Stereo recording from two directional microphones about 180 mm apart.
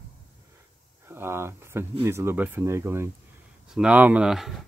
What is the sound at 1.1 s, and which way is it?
Speech, 15° right (ahead or behind).